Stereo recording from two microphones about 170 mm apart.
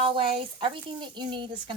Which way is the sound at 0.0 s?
30° right (ahead or behind).